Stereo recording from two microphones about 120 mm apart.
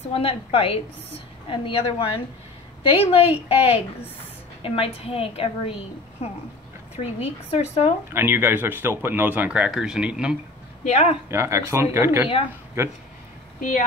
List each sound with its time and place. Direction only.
0.1 s a woman's voice: 50° left (ahead or behind)
8.1 s speech: 15° right (ahead or behind)
10.8 s speech: 65° left (ahead or behind)
11.2 s speech: 25° right (ahead or behind)